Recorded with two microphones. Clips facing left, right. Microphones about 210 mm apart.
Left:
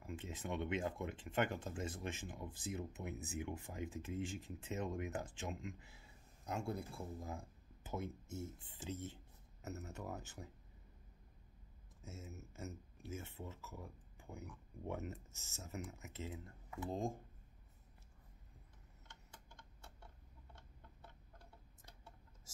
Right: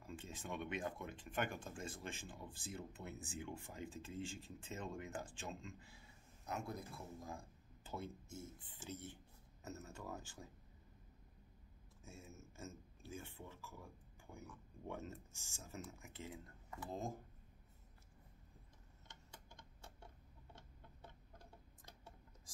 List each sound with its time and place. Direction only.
0.0 s speech: 20° left (ahead or behind)
6.5 s speech: 30° left (ahead or behind)
12.0 s speech: 20° left (ahead or behind)